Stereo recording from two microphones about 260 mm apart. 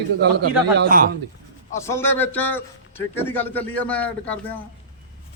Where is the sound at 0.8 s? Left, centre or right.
Right.